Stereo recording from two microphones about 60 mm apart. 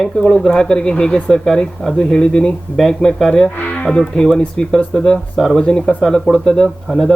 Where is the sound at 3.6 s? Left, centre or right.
Left.